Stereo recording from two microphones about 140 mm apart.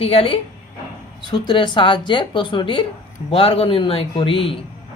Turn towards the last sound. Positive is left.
turn(degrees=40)  # may be behind; listen again after turning